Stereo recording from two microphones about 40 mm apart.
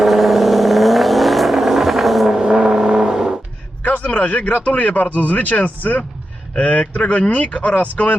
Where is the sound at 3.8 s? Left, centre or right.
Left.